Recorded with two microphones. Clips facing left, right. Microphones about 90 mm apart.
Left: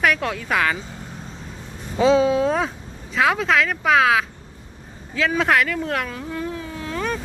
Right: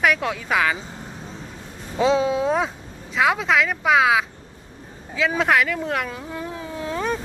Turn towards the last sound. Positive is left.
turn(degrees=-25)  # may be behind; listen again after turning